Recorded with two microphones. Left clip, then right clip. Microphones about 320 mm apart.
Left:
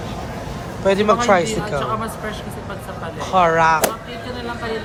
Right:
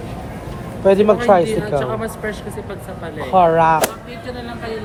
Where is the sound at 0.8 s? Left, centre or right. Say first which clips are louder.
Right 3 dB; centre.